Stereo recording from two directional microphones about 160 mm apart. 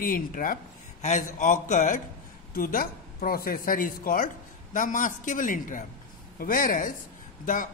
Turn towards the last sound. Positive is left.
turn(degrees=55)  # may be behind; listen again after turning